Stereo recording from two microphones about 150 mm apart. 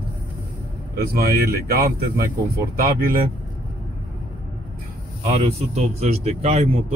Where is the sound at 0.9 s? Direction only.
90° right.